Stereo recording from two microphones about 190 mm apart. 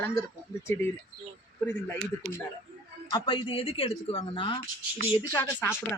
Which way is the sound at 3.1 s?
25° left (ahead or behind).